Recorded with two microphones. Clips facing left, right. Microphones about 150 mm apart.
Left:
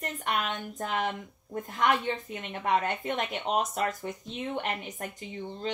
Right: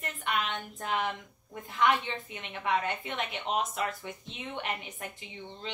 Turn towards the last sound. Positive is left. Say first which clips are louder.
# left 7 dB
turn(degrees=45)  # may be behind; listen again after turning